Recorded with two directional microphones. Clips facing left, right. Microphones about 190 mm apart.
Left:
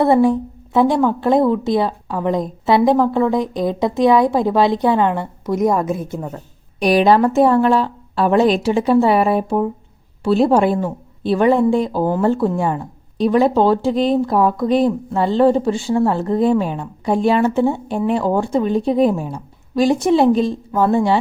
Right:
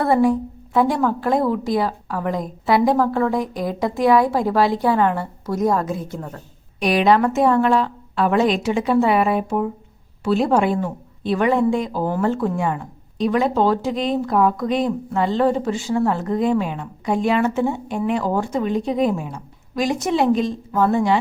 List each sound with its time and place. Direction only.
0.0 s a woman's voice: 25° left (ahead or behind)
6.1 s a woman's voice: 10° left (ahead or behind)
6.7 s speech: 35° left (ahead or behind)